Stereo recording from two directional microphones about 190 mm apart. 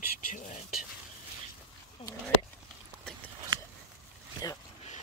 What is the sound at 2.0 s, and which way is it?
Speech, 35° left (ahead or behind).